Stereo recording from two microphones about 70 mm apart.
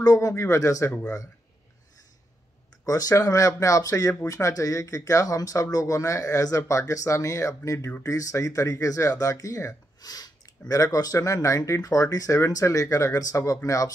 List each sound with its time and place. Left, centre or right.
0.0 s speech: left
2.8 s speech: left
10.7 s speech: left